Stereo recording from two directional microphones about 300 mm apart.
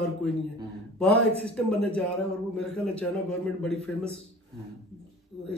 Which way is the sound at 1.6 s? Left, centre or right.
Centre.